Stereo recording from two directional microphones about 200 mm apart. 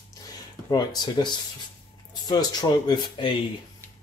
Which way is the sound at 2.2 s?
20° left (ahead or behind).